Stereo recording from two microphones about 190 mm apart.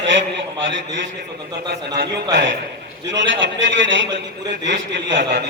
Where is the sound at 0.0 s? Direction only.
70° right (ahead or behind).